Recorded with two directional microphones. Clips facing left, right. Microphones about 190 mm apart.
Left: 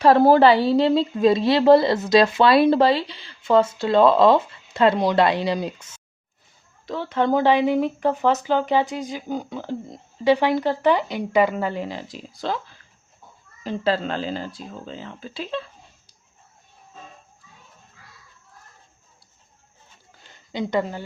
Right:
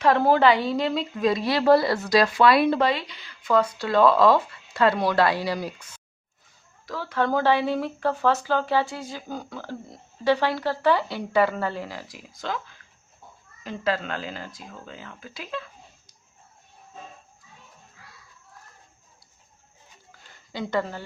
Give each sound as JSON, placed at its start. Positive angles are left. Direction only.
{"t": 0.0, "sound": "a woman's voice", "side_deg": 35}
{"t": 20.5, "sound": "speech", "side_deg": 20}